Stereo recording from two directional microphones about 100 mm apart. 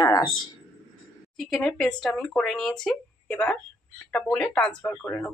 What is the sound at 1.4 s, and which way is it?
Speech, 5° left (ahead or behind).